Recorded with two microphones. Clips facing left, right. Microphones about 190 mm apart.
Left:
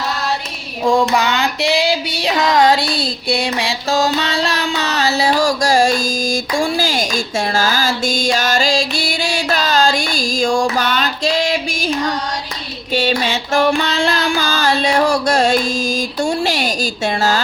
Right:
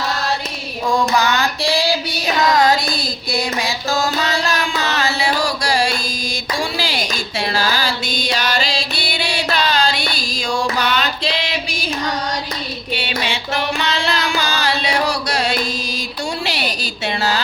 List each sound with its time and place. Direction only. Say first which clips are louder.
1.1 s female singing: left 1 dB; 25° left (ahead or behind); by 11.9 s 45° left (ahead or behind)
12.9 s music: left 7 dB; 45° left (ahead or behind)
16.2 s speech: left 5 dB; 45° left (ahead or behind)